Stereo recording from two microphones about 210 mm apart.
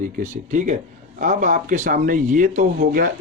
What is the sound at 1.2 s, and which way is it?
Speech, 35° right (ahead or behind).